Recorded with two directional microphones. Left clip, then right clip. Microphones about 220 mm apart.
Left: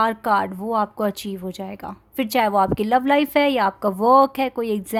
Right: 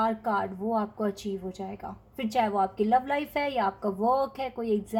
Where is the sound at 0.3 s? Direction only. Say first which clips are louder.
Left 8 dB; 45° left (ahead or behind).